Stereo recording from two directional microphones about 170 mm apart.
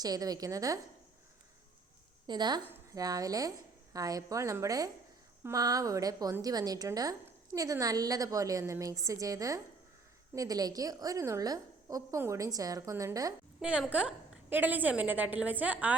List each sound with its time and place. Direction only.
0.0 s a woman's voice: 20° right (ahead or behind)
2.2 s a woman's voice: 25° right (ahead or behind)
13.6 s a woman's voice: 5° right (ahead or behind)